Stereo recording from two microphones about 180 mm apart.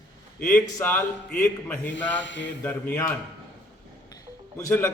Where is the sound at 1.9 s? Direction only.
90° left.